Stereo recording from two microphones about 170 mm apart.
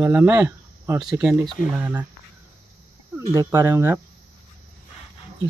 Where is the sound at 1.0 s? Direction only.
5° right (ahead or behind).